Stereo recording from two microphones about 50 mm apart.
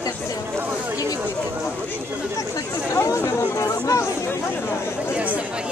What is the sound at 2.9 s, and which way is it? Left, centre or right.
Speech, left.